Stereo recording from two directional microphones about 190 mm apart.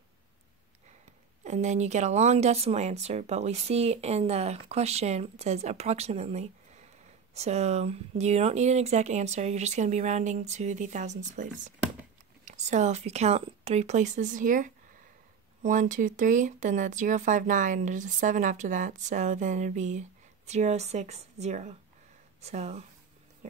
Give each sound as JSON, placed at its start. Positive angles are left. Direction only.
{"t": 1.4, "sound": "speech", "side_deg": -40}
{"t": 12.4, "sound": "speech", "side_deg": -40}